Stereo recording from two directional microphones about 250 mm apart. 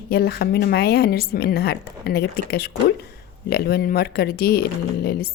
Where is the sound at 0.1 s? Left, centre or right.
Left.